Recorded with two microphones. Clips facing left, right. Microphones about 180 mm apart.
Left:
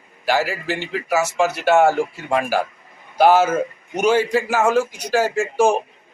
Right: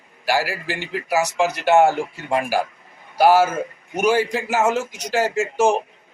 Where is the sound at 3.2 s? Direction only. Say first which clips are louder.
Left 1 dB; 10° right (ahead or behind).